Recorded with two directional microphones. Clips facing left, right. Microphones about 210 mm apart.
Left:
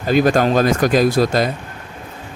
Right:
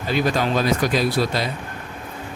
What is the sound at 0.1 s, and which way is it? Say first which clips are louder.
Speech: left 7 dB; 50° left (ahead or behind).